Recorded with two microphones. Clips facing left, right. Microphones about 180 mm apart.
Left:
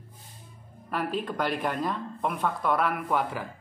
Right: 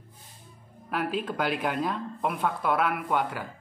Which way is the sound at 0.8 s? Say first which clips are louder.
Right 1 dB; centre (ahead or behind).